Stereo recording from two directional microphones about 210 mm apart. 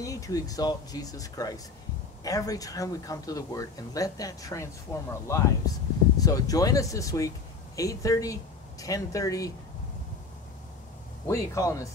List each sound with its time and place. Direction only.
0.0 s speech: 15° left (ahead or behind)
11.2 s speech: 15° left (ahead or behind)